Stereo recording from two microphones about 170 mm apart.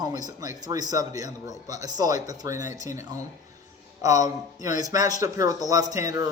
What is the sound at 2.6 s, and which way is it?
Speech, 45° left (ahead or behind).